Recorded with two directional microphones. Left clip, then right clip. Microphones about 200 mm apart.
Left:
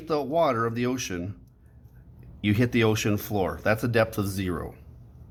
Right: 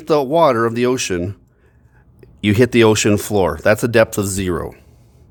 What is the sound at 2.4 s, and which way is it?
A man's voice, 55° right (ahead or behind).